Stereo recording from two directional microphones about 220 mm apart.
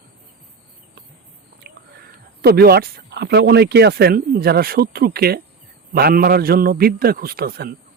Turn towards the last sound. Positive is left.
turn(degrees=-45)  # may be behind; listen again after turning